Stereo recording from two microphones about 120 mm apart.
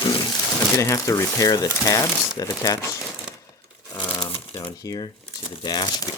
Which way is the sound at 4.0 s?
40° left (ahead or behind).